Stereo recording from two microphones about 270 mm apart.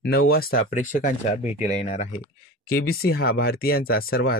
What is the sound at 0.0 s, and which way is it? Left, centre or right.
Speech, left.